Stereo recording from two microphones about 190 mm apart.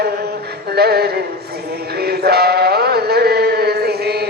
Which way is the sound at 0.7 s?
55° right (ahead or behind).